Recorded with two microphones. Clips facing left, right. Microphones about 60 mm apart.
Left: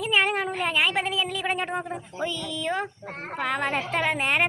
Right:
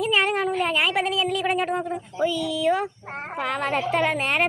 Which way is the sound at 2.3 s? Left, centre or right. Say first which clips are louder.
Right 6 dB; centre.